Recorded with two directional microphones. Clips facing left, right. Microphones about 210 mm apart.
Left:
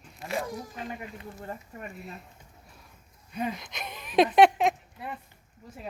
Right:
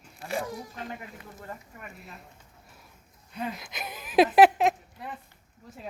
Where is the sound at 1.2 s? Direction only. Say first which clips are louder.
Left 3 dB; 25° left (ahead or behind).